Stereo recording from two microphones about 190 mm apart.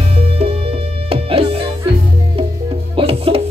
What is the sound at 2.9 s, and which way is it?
Music, 30° right (ahead or behind).